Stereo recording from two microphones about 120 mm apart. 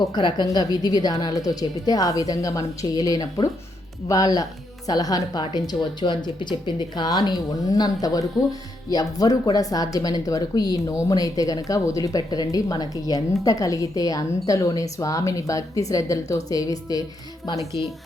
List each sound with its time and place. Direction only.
0.1 s a woman's voice: 40° left (ahead or behind)
17.5 s speech: 25° right (ahead or behind)